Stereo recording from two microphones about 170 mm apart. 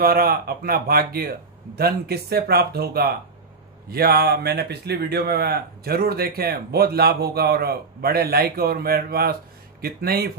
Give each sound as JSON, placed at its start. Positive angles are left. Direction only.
{"t": 0.0, "sound": "speech", "side_deg": -65}